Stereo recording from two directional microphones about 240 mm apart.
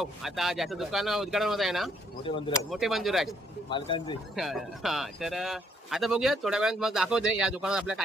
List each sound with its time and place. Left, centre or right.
0.0 s a man's voice: centre
2.2 s speech: left
2.7 s a man's voice: centre
3.7 s speech: left
4.4 s a man's voice: centre